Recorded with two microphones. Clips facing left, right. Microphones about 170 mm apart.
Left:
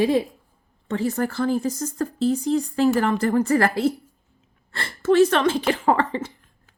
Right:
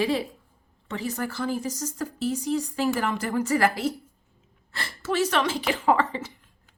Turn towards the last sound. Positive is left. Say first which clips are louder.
# left 2 dB
turn(degrees=60)  # may be behind; listen again after turning